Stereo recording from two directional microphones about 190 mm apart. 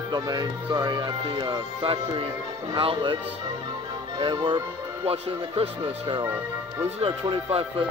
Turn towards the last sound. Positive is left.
turn(degrees=-25)  # may be behind; listen again after turning